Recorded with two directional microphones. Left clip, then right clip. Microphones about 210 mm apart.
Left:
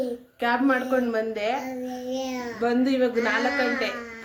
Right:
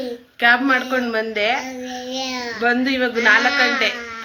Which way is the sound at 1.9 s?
25° left (ahead or behind).